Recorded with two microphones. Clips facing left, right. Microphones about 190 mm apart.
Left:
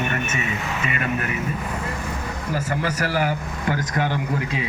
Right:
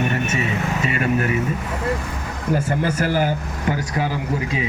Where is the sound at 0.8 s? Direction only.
35° right (ahead or behind).